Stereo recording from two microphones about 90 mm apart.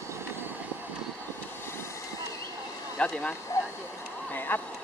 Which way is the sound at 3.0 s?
15° left (ahead or behind).